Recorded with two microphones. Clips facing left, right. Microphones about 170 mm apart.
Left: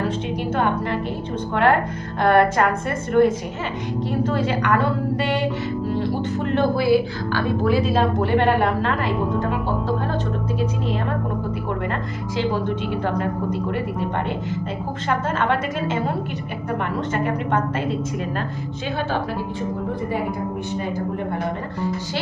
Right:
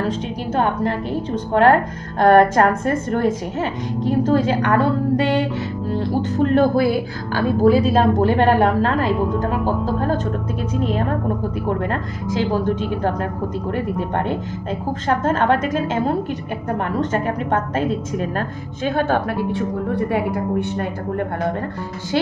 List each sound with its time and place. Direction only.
0.6 s a woman's voice: 40° right (ahead or behind)
6.4 s a woman's voice: 40° right (ahead or behind)
15.0 s a woman's voice: 40° right (ahead or behind)
18.9 s a woman's voice: 55° right (ahead or behind)
19.5 s speech: 70° right (ahead or behind)